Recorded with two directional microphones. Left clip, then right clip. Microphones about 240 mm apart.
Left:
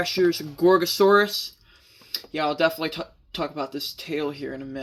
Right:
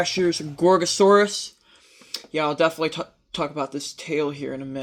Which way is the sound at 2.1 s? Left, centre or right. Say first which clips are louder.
Right 2 dB; right.